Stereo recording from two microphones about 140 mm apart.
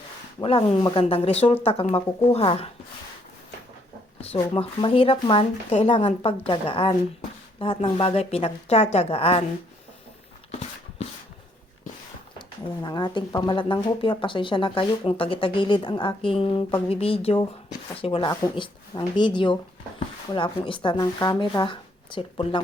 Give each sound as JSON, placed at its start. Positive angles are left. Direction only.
{"t": 0.4, "sound": "speech", "side_deg": 35}
{"t": 4.2, "sound": "speech", "side_deg": 40}
{"t": 12.8, "sound": "speech", "side_deg": 30}